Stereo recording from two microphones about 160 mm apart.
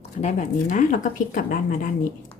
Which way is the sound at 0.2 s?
45° left (ahead or behind).